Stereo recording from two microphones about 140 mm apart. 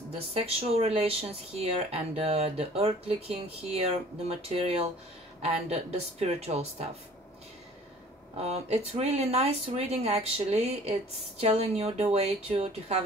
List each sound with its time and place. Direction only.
0.3 s speech: 45° right (ahead or behind)
8.4 s speech: 50° right (ahead or behind)